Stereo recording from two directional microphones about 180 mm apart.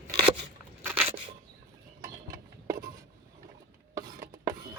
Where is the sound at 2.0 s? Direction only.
55° right (ahead or behind).